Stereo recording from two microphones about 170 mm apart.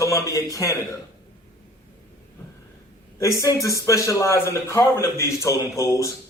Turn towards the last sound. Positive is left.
turn(degrees=20)  # may be behind; listen again after turning